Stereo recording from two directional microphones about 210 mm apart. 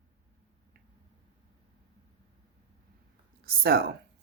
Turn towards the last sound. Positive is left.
turn(degrees=-45)  # may be behind; listen again after turning